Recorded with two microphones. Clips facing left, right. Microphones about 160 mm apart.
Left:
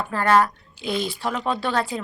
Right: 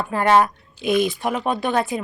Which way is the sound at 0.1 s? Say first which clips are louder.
Right 2 dB; 20° right (ahead or behind).